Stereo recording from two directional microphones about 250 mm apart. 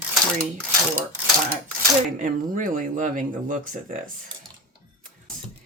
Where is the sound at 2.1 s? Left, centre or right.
Right.